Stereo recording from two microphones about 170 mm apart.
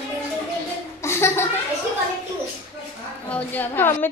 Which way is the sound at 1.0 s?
15° left (ahead or behind).